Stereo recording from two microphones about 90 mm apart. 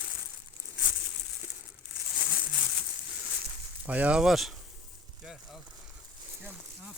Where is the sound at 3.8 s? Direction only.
15° right (ahead or behind).